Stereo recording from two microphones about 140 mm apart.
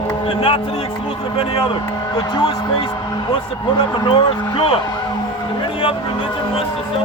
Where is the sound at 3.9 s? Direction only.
35° left (ahead or behind).